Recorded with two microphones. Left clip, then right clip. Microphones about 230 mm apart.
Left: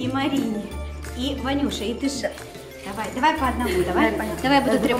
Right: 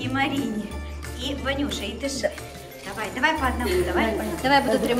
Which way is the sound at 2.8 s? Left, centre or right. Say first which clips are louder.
Left 2 dB; centre.